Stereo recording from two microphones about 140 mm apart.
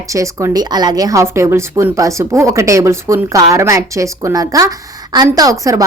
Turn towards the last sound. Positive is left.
turn(degrees=-25)  # may be behind; listen again after turning